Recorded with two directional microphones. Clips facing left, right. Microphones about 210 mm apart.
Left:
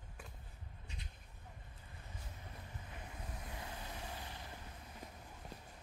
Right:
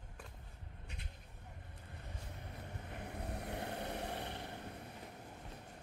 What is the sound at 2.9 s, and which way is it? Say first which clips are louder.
Vehicle: right 8 dB; 65° right (ahead or behind).